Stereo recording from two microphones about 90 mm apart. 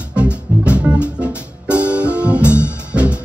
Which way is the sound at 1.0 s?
15° right (ahead or behind).